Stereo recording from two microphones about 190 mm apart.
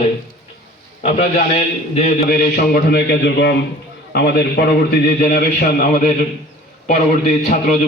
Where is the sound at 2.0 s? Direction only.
35° left (ahead or behind).